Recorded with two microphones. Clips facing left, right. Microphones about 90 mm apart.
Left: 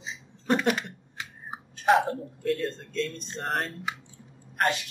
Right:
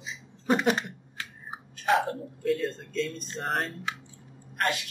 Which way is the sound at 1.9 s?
Centre (ahead or behind).